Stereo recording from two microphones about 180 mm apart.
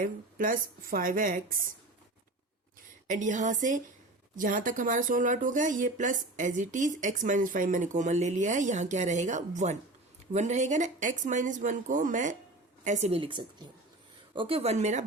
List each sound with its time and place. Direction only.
0.0 s speech: 50° right (ahead or behind)
3.1 s a woman's voice: 45° right (ahead or behind)